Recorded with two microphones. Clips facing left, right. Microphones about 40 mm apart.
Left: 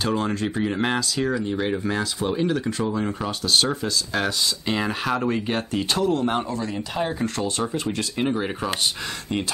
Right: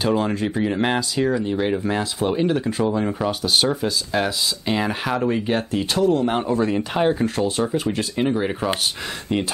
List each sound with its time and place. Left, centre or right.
0.0 s speech: centre; by 2.6 s right
2.6 s speech: centre
6.5 s speech: right
7.2 s speech: centre